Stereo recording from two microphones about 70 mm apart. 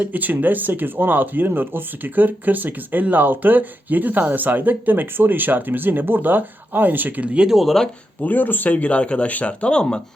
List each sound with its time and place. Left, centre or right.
0.0 s speech: right
7.5 s speech: centre
8.2 s speech: left